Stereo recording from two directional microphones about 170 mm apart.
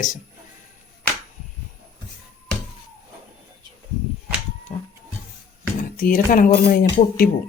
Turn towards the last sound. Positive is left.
turn(degrees=55)  # may be behind; listen again after turning